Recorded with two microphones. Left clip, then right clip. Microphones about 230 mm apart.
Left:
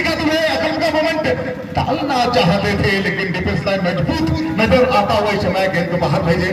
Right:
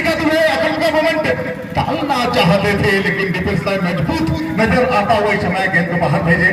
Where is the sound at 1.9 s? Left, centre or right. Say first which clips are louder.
Left 1 dB; right.